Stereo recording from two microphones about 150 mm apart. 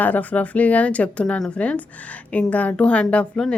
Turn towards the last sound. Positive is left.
turn(degrees=5)  # may be behind; listen again after turning